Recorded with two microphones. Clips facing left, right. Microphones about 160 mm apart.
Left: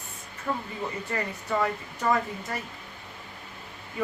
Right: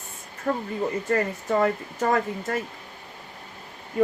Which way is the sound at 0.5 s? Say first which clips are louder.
Right 6 dB; 45° right (ahead or behind).